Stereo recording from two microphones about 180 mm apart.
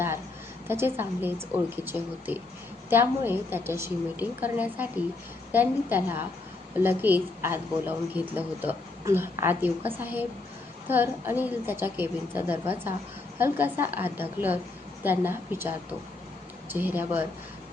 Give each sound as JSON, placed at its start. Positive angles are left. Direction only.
{"t": 0.7, "sound": "a woman's voice", "side_deg": -10}